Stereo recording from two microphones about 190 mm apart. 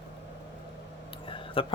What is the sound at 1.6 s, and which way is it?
Speech, 30° left (ahead or behind).